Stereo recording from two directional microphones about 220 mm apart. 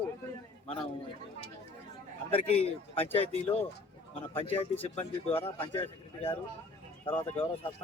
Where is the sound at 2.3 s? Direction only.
25° left (ahead or behind).